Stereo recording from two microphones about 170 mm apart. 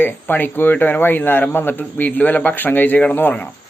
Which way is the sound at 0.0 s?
10° left (ahead or behind).